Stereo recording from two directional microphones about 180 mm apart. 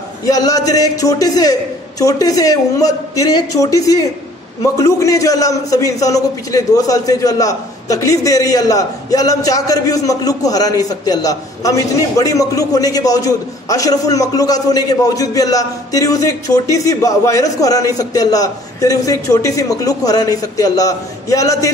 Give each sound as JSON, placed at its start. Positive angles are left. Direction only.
{"t": 0.2, "sound": "a man's voice", "side_deg": 20}